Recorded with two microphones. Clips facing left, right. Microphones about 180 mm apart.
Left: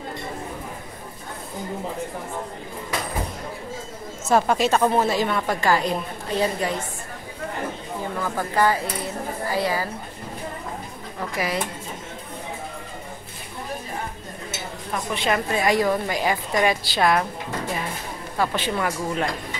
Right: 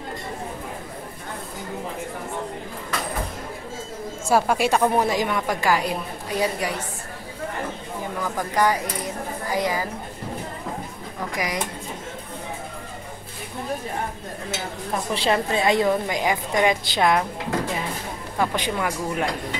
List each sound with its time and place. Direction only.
4.3 s a woman's voice: 10° right (ahead or behind)
8.2 s a woman's voice: 15° right (ahead or behind)
11.3 s a woman's voice: 15° right (ahead or behind)
15.1 s a woman's voice: 30° right (ahead or behind)
18.4 s a woman's voice: 15° right (ahead or behind)